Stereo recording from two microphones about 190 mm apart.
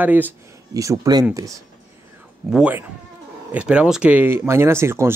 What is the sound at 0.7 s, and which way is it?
Speech, 20° right (ahead or behind).